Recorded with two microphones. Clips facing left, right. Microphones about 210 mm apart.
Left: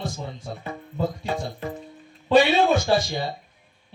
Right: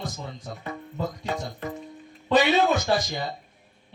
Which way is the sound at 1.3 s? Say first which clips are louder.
Left 2 dB; 30° left (ahead or behind).